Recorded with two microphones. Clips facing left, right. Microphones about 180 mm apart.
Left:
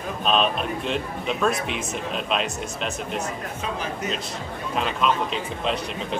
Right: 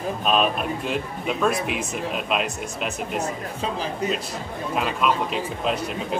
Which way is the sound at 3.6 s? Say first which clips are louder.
Right 4 dB; 35° right (ahead or behind).